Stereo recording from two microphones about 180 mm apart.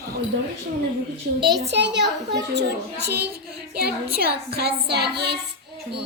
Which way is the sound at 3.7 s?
60° right (ahead or behind).